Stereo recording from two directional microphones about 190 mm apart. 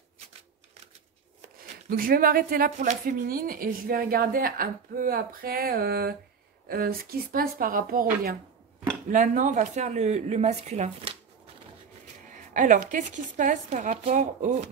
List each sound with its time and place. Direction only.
1.9 s a woman's voice: 50° right (ahead or behind); by 11.1 s 35° right (ahead or behind)
12.3 s a woman's voice: 40° right (ahead or behind)